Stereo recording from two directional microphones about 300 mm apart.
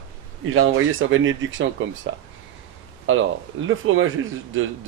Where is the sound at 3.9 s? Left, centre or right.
Right.